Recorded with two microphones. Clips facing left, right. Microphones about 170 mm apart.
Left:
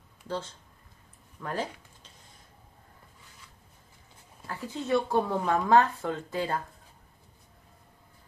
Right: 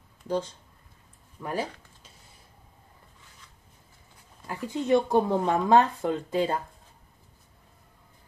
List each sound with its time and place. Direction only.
0.3 s speech: 15° right (ahead or behind)
4.5 s speech: 15° right (ahead or behind)